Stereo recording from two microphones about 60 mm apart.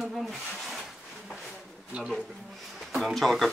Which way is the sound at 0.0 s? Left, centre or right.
Centre.